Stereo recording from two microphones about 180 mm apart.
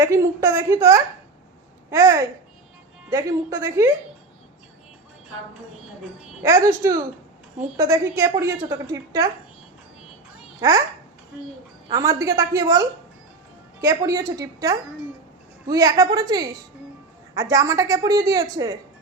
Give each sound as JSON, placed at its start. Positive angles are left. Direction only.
{"t": 0.0, "sound": "a woman's voice", "side_deg": -15}
{"t": 6.7, "sound": "a woman's voice", "side_deg": -15}
{"t": 10.6, "sound": "a woman's voice", "side_deg": -20}
{"t": 11.9, "sound": "a woman's voice", "side_deg": -20}